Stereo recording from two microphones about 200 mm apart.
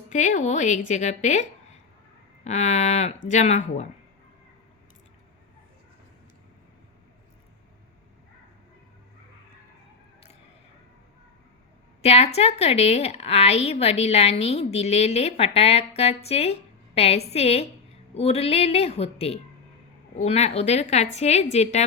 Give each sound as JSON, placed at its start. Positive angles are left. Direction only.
{"t": 0.1, "sound": "a woman's voice", "side_deg": 35}
{"t": 12.0, "sound": "a woman's voice", "side_deg": 30}